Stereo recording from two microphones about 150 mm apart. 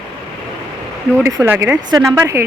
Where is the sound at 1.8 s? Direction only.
25° right (ahead or behind).